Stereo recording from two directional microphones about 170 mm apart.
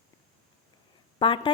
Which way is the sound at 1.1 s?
30° left (ahead or behind).